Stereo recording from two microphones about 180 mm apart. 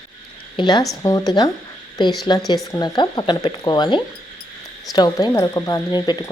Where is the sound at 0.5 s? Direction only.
25° left (ahead or behind).